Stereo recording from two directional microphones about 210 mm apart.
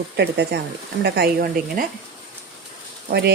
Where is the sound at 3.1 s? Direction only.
50° right (ahead or behind).